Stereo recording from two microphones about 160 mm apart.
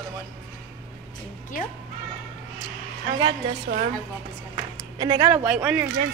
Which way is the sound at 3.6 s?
60° right (ahead or behind).